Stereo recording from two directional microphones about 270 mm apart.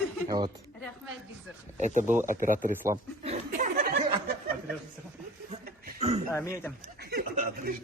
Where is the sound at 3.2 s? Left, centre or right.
Right.